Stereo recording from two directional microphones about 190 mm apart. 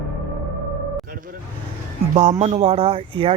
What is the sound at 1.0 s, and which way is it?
Vehicle, 50° right (ahead or behind).